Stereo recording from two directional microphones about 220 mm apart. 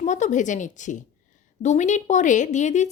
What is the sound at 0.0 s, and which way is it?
A woman's voice, 35° left (ahead or behind).